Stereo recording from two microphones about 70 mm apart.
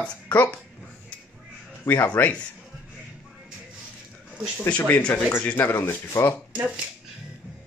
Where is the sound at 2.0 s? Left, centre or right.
Left.